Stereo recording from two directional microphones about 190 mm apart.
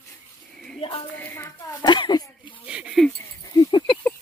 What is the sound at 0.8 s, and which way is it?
Speech, 30° left (ahead or behind).